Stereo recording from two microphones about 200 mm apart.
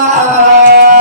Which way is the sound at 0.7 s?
45° right (ahead or behind).